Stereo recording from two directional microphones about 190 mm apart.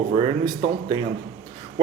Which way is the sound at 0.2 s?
25° right (ahead or behind).